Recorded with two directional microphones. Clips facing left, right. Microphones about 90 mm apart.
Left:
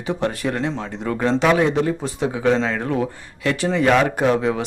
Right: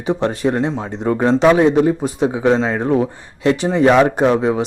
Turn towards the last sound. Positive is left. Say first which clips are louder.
# right 4 dB
turn(degrees=-25)  # may be behind; listen again after turning